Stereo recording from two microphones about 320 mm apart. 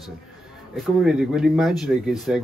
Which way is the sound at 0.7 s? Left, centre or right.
Centre.